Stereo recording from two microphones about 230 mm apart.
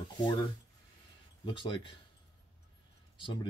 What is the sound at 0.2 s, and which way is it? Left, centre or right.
Speech, left.